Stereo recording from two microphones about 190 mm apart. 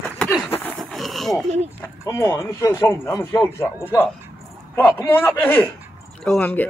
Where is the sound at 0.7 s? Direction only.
Centre (ahead or behind).